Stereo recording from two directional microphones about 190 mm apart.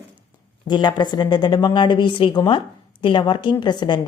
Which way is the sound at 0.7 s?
20° left (ahead or behind).